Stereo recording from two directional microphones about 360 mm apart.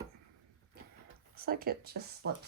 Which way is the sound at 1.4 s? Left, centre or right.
Right.